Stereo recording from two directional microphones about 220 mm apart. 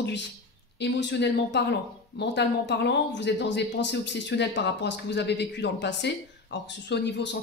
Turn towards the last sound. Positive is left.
turn(degrees=50)  # may be behind; listen again after turning